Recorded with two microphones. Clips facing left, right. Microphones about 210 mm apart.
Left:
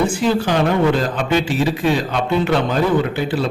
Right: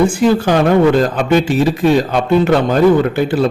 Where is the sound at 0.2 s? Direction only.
50° right (ahead or behind).